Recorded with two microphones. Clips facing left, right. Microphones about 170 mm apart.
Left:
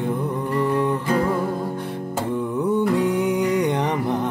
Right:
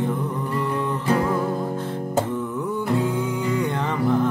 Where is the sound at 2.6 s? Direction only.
15° left (ahead or behind).